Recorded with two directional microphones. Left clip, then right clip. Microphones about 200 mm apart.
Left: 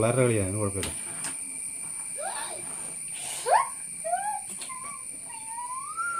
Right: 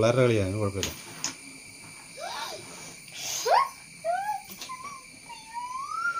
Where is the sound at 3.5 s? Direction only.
15° right (ahead or behind).